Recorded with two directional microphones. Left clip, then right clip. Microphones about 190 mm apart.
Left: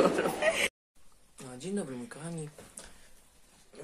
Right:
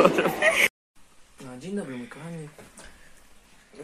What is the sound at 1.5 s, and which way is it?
Speech, 30° left (ahead or behind).